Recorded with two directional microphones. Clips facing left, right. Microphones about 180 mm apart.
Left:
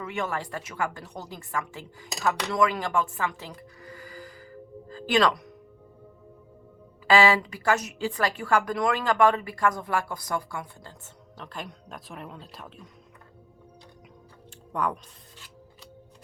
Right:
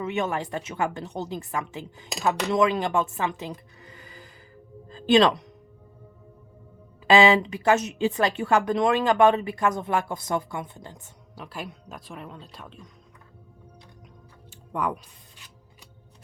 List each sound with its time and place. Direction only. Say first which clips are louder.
0.0 s speech: right 4 dB; 20° right (ahead or behind)
7.1 s speech: right 3 dB; 20° right (ahead or behind); by 12.9 s 5° left (ahead or behind)
14.7 s speech: right 1 dB; 5° right (ahead or behind)